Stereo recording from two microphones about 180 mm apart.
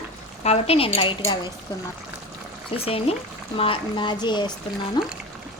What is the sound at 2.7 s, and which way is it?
Speech, 35° left (ahead or behind).